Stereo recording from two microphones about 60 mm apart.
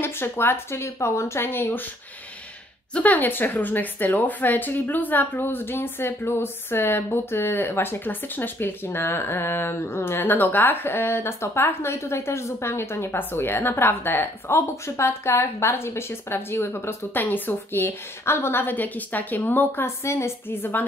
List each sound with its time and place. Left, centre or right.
0.0 s a woman's voice: left
2.9 s a woman's voice: left
20.0 s a woman's voice: left
20.4 s a woman's voice: left